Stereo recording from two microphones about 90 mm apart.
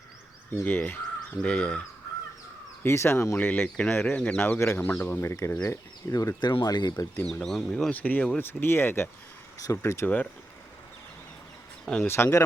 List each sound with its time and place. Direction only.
0.6 s speech: 20° left (ahead or behind)
2.8 s speech: 30° left (ahead or behind)
3.3 s speech: 20° left (ahead or behind)
5.6 s speech: 40° left (ahead or behind)
7.3 s speech: 5° left (ahead or behind)
7.9 s speech: 20° left (ahead or behind)
9.6 s speech: 35° left (ahead or behind)
12.0 s speech: 25° left (ahead or behind)